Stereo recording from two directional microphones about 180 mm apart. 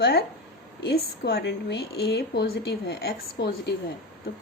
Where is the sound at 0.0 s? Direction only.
65° left (ahead or behind).